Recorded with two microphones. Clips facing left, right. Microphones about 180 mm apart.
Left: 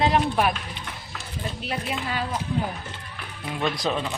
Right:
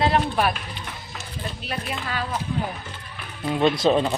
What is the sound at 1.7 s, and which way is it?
Speech, 20° left (ahead or behind).